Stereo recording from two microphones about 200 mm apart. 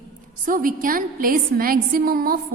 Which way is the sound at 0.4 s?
45° right (ahead or behind).